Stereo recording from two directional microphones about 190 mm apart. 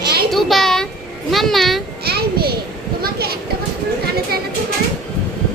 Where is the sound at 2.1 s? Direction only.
55° right (ahead or behind).